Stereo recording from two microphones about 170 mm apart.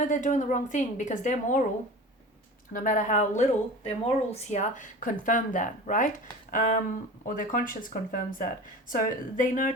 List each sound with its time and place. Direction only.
0.0 s speech: 50° left (ahead or behind)
2.7 s speech: 50° left (ahead or behind)